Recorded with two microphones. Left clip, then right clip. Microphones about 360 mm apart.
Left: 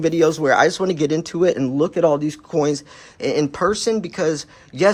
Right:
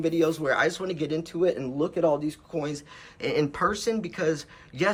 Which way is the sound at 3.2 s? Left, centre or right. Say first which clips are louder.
Left 6 dB; centre.